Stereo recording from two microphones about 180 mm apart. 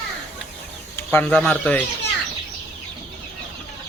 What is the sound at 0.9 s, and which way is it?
Speech, 10° left (ahead or behind).